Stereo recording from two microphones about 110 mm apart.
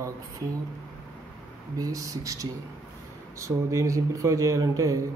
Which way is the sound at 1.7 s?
30° right (ahead or behind).